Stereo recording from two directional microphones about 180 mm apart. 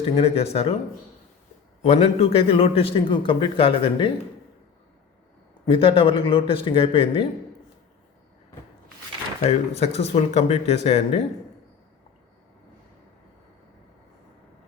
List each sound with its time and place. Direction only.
0.0 s a man's voice: 35° left (ahead or behind)
1.8 s a man's voice: 35° left (ahead or behind)
5.6 s a man's voice: 30° left (ahead or behind)
9.4 s a man's voice: 35° left (ahead or behind)